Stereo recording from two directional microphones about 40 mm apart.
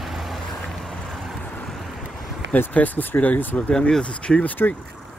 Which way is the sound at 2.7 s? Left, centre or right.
Left.